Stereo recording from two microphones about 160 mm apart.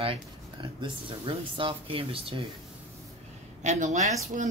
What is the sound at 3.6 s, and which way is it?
Speech, 45° right (ahead or behind).